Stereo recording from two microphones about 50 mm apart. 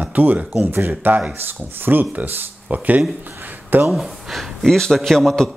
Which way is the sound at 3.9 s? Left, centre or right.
Centre.